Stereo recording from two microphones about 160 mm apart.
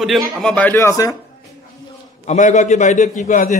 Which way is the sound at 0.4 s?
5° left (ahead or behind).